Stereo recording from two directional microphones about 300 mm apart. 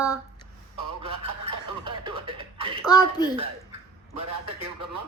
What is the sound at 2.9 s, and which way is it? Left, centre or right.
Speech, centre.